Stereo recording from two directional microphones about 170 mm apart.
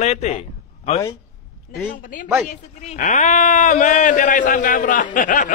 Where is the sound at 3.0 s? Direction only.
45° left (ahead or behind).